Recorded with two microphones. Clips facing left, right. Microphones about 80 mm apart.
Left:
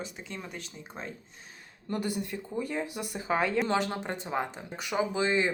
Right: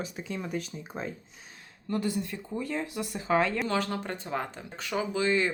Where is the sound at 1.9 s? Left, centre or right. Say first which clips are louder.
Right 2 dB; centre.